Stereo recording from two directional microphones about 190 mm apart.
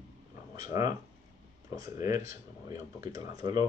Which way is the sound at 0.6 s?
20° right (ahead or behind).